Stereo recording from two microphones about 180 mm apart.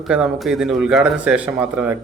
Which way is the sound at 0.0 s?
Centre (ahead or behind).